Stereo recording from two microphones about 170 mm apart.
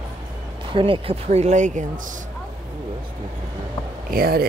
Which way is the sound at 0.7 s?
30° right (ahead or behind).